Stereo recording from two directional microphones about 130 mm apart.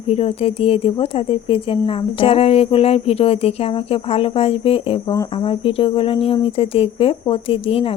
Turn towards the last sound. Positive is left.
turn(degrees=50)  # may be behind; listen again after turning